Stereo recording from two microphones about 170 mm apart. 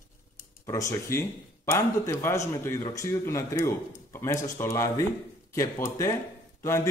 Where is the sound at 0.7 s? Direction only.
20° left (ahead or behind).